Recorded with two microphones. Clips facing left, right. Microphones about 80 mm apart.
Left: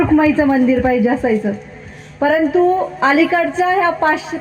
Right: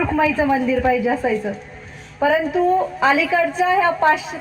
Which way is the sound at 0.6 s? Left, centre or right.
Left.